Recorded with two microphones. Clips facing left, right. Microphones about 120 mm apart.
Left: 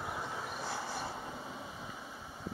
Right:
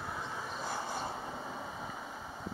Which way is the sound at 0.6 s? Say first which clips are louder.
Right 3 dB; 20° right (ahead or behind).